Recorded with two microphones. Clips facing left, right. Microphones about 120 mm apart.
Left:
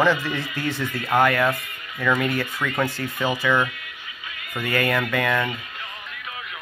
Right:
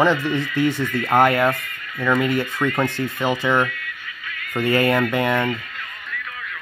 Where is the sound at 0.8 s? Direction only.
15° left (ahead or behind).